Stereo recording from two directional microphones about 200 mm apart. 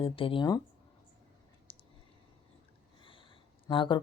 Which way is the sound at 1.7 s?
25° left (ahead or behind).